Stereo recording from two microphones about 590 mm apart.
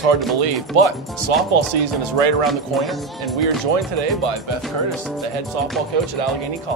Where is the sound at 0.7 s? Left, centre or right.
Right.